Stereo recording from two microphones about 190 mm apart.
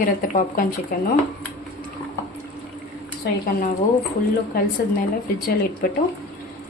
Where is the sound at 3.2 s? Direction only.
60° left (ahead or behind).